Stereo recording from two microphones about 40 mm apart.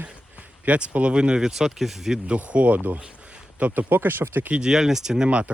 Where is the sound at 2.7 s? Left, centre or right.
Right.